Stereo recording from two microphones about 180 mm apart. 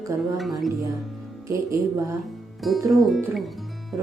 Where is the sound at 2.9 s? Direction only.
Centre (ahead or behind).